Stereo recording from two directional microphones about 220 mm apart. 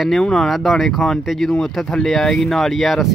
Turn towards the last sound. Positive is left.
turn(degrees=0)  # may be behind; listen again after turning